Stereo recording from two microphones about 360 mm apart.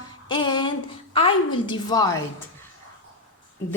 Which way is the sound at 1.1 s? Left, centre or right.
Centre.